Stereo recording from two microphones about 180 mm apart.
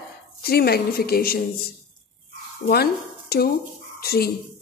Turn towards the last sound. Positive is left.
turn(degrees=60)  # may be behind; listen again after turning